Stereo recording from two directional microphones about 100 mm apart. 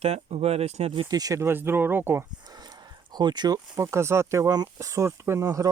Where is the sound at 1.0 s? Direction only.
40° right (ahead or behind); by 2.2 s 20° right (ahead or behind).